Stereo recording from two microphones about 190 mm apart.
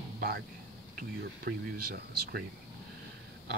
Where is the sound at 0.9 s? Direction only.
55° right (ahead or behind).